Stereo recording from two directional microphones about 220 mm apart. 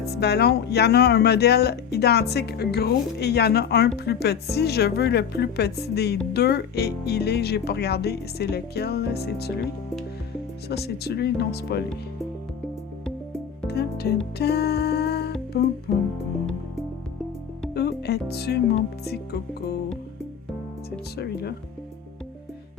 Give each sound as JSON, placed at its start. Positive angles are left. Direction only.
{"t": 0.1, "sound": "speech", "side_deg": 50}
{"t": 10.7, "sound": "speech", "side_deg": 45}
{"t": 13.7, "sound": "speech", "side_deg": 45}
{"t": 14.3, "sound": "music", "side_deg": 45}
{"t": 15.5, "sound": "speech", "side_deg": 45}
{"t": 17.7, "sound": "music", "side_deg": 45}
{"t": 19.0, "sound": "speech", "side_deg": 45}